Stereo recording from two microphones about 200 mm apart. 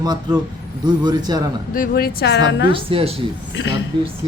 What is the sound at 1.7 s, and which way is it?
Speech, 45° left (ahead or behind).